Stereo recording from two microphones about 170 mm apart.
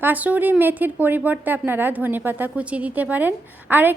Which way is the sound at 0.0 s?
10° right (ahead or behind).